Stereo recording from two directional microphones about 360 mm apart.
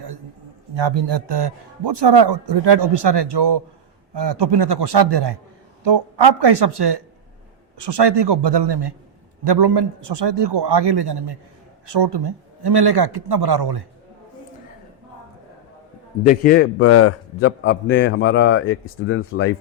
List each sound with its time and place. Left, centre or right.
1.3 s speech: right
6.4 s speech: right
16.2 s a man's voice: left
16.7 s a man's voice: left